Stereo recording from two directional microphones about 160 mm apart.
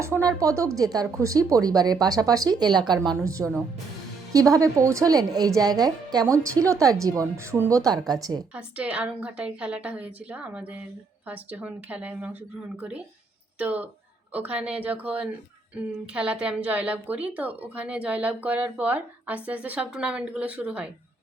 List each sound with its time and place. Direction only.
0.0 s a woman's voice: 20° right (ahead or behind)
8.5 s a woman's voice: 5° right (ahead or behind)
13.6 s a woman's voice: 10° right (ahead or behind)